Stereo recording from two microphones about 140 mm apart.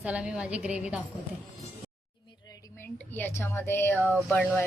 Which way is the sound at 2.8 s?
15° left (ahead or behind).